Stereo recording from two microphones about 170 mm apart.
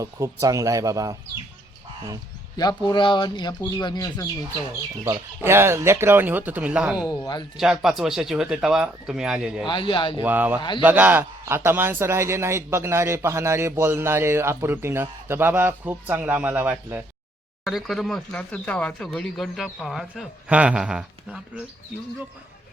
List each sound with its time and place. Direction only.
0.0 s speech: 20° right (ahead or behind)
2.6 s speech: 25° left (ahead or behind)
5.0 s a man's voice: 15° right (ahead or behind)
7.0 s speech: 20° left (ahead or behind)
7.5 s speech: 5° right (ahead or behind)
9.6 s speech: 30° left (ahead or behind)
10.2 s a man's voice: 10° right (ahead or behind)
17.6 s speech: centre (ahead or behind)